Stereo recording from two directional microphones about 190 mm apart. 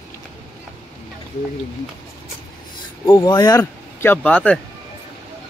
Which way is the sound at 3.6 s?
10° left (ahead or behind).